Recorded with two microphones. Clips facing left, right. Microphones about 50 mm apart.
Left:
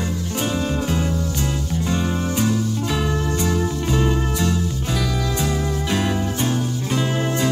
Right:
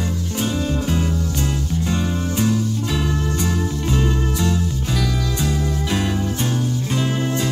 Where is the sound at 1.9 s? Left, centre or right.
Centre.